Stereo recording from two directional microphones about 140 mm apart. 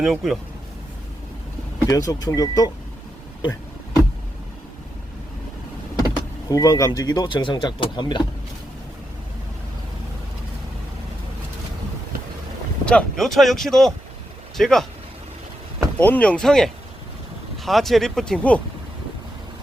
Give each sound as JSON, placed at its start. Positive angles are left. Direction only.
{"t": 0.0, "sound": "speech", "side_deg": 0}
{"t": 1.9, "sound": "speech", "side_deg": 25}
{"t": 6.5, "sound": "speech", "side_deg": 25}
{"t": 12.8, "sound": "speech", "side_deg": 5}
{"t": 16.0, "sound": "speech", "side_deg": 10}